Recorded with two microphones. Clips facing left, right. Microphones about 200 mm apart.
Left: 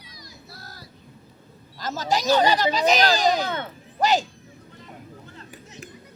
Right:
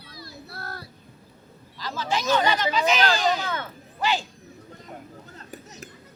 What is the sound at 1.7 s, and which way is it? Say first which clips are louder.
Speech: left 3 dB; 45° left (ahead or behind).